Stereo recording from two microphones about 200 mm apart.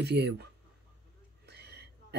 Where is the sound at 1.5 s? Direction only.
55° right (ahead or behind).